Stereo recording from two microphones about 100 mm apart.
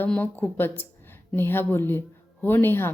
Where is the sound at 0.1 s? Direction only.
15° left (ahead or behind).